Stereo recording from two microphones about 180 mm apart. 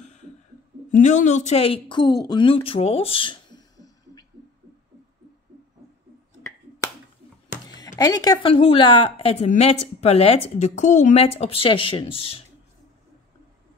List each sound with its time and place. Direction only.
0.0 s a sound: 40° left (ahead or behind)
0.9 s speech: 45° left (ahead or behind); by 4.3 s 20° left (ahead or behind)
7.6 s music: 20° left (ahead or behind)
8.0 s a woman's voice: 20° left (ahead or behind)